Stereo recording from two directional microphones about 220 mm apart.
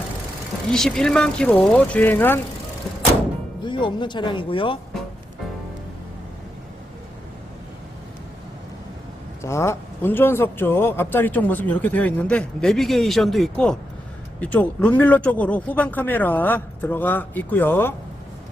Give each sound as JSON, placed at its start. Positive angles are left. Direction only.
{"t": 0.7, "sound": "speech", "side_deg": 0}
{"t": 3.6, "sound": "speech", "side_deg": 20}
{"t": 9.4, "sound": "a man's voice", "side_deg": 15}